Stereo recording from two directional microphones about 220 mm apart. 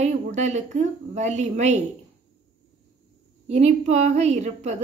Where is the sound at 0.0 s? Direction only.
30° right (ahead or behind).